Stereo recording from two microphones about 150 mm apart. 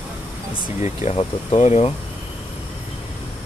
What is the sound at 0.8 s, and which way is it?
Speech, 50° left (ahead or behind).